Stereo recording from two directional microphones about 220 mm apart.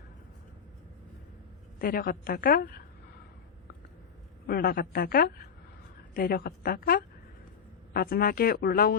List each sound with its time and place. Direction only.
1.8 s a woman's voice: 40° left (ahead or behind)
4.4 s a woman's voice: 40° left (ahead or behind)